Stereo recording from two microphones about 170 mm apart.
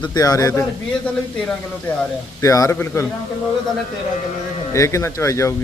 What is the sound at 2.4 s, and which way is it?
Speech, 20° left (ahead or behind).